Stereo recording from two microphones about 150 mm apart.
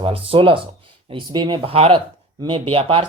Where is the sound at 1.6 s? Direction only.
40° right (ahead or behind).